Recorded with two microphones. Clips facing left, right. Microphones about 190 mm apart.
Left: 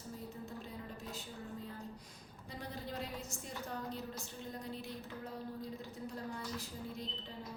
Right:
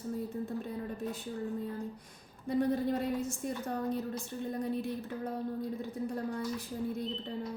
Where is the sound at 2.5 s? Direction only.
55° right (ahead or behind).